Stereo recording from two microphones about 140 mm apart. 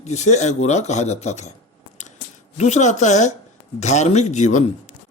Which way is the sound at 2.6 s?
55° left (ahead or behind).